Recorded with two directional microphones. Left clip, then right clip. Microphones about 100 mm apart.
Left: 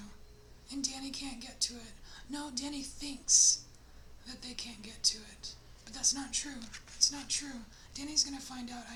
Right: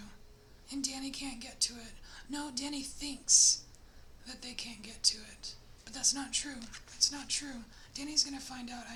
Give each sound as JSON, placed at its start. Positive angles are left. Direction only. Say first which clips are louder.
{"t": 0.7, "sound": "a woman's voice", "louder": "even", "side_deg": -35}
{"t": 6.6, "sound": "a woman's voice", "louder": "even", "side_deg": -10}
{"t": 7.0, "sound": "a woman's voice", "louder": "left 1 dB", "side_deg": -35}